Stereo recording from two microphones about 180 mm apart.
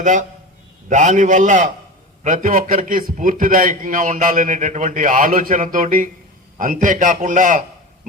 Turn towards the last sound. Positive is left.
turn(degrees=-45)  # may be behind; listen again after turning